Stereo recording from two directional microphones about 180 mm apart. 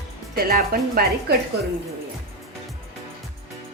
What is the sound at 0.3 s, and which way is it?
Speech, 55° right (ahead or behind).